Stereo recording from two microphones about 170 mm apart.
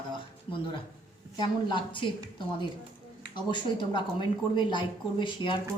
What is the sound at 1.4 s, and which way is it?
Speech, 30° left (ahead or behind).